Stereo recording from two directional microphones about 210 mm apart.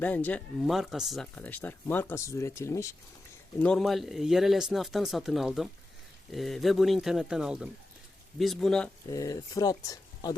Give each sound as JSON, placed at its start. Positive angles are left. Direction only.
{"t": 0.0, "sound": "speech", "side_deg": 10}
{"t": 3.6, "sound": "speech", "side_deg": 5}
{"t": 9.0, "sound": "speech", "side_deg": 15}